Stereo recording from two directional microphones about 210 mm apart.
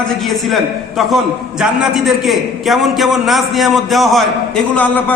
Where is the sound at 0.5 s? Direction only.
Centre (ahead or behind).